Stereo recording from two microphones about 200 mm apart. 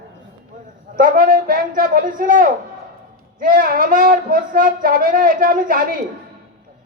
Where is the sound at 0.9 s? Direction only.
45° right (ahead or behind).